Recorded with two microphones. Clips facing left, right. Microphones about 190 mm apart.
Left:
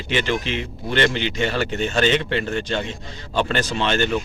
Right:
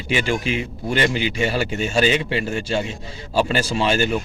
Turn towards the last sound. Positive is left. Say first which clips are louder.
# right 2 dB
turn(degrees=-10)  # may be behind; listen again after turning